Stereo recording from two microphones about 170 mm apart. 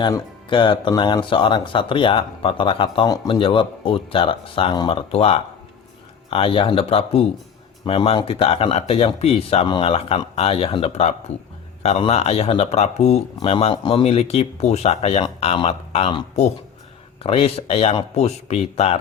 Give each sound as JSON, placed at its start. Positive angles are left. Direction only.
{"t": 0.0, "sound": "speech", "side_deg": 30}